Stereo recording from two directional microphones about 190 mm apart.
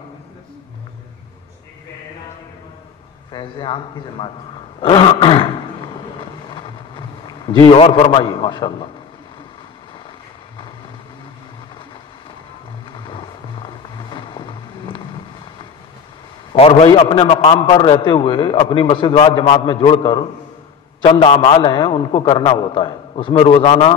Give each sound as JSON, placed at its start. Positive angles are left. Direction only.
{"t": 3.3, "sound": "a man's voice", "side_deg": 25}
{"t": 4.7, "sound": "a sound", "side_deg": 30}
{"t": 12.9, "sound": "vehicle", "side_deg": 25}
{"t": 16.5, "sound": "a man's voice", "side_deg": 30}